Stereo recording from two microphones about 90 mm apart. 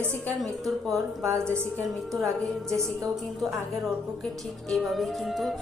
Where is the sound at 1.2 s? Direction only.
30° right (ahead or behind).